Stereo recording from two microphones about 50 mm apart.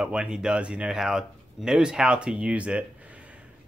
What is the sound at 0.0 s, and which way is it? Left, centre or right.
Speech, right.